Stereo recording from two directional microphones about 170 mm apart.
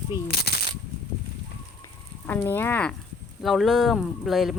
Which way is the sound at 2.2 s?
10° left (ahead or behind).